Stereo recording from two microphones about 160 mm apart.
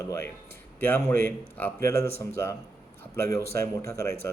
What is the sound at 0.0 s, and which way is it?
A man's voice, 20° left (ahead or behind).